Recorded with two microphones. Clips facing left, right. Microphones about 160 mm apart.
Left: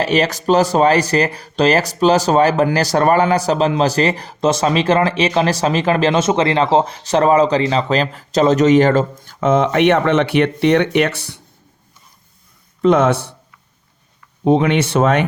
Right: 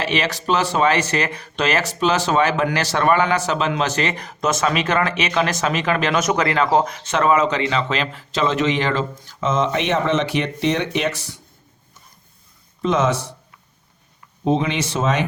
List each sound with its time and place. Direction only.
0.0 s speech: 40° left (ahead or behind); by 11.3 s 65° left (ahead or behind)
12.8 s speech: 60° left (ahead or behind)
14.4 s speech: 60° left (ahead or behind)